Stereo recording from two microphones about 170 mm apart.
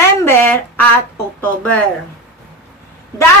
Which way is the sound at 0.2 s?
10° left (ahead or behind).